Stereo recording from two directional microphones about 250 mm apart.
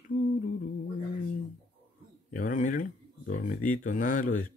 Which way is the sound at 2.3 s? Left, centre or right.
Left.